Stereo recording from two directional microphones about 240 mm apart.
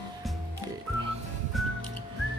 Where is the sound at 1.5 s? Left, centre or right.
Centre.